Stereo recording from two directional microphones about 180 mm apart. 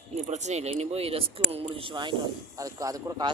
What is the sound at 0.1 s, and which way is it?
A man's voice, 40° right (ahead or behind).